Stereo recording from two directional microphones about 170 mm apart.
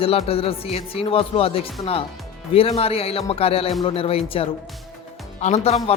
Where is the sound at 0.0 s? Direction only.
35° left (ahead or behind).